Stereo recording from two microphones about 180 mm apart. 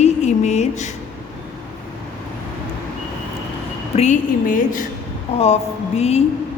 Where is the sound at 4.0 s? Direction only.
45° left (ahead or behind).